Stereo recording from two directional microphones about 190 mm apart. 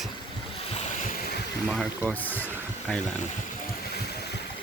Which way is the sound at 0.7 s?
40° left (ahead or behind).